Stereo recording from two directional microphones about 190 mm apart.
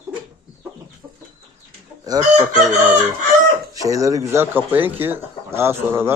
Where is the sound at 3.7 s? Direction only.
20° right (ahead or behind).